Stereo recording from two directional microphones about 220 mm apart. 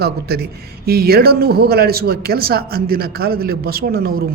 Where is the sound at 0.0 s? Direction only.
45° right (ahead or behind).